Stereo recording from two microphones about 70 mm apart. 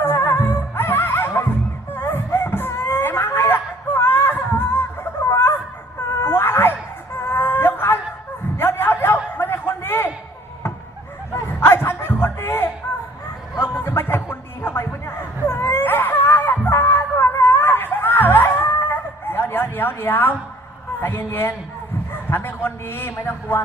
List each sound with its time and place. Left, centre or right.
0.0 s music: left
1.9 s wail: left
6.2 s cat: left
7.3 s whimper: left
8.5 s bow-wow: left
9.4 s a sound: left
11.6 s a sound: left
13.6 s music: left
18.4 s a sound: left